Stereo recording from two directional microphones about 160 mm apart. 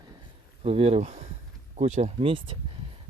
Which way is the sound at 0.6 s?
40° right (ahead or behind).